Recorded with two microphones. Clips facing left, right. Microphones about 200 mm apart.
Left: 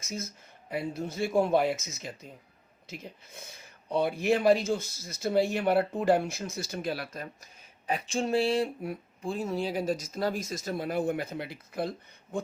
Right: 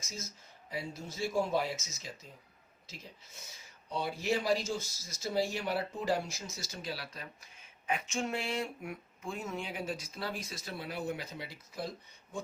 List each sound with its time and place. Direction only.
0.0 s speech: 60° left (ahead or behind)
7.9 s speech: 35° left (ahead or behind); by 12.4 s 60° left (ahead or behind)